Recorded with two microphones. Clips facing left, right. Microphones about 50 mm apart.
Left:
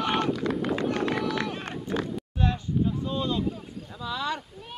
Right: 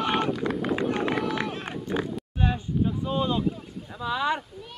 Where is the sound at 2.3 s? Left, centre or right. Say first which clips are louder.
Even; right.